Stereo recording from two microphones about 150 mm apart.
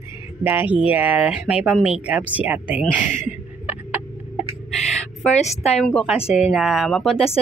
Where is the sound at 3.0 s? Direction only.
55° left (ahead or behind).